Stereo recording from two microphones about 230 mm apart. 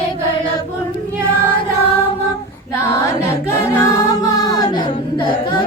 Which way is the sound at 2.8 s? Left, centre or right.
Centre.